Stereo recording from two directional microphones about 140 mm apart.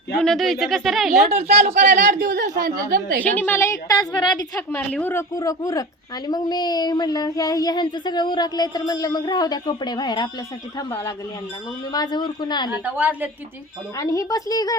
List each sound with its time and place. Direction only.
0.2 s speech: centre (ahead or behind)
1.3 s speech: 50° right (ahead or behind)
2.2 s speech: 85° right
3.2 s speech: 10° left (ahead or behind); by 4.4 s 35° left (ahead or behind)
4.5 s a woman's voice: 10° left (ahead or behind)
5.3 s speech: 25° left (ahead or behind)
12.8 s a woman's voice: 10° right (ahead or behind)
14.0 s speech: 25° left (ahead or behind)